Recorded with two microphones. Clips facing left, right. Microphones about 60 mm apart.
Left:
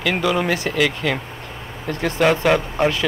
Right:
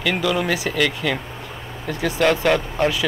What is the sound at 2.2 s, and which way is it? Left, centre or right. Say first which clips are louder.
Speech: left 1 dB; centre.